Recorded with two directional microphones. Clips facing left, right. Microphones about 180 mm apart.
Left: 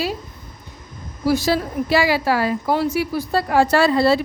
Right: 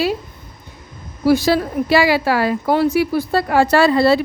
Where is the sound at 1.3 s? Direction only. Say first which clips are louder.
Right 4 dB; 65° right (ahead or behind).